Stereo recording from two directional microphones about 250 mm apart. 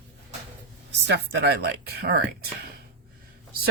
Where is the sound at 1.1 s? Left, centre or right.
Right.